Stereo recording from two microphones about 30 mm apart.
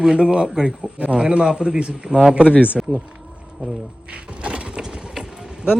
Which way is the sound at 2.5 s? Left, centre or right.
Left.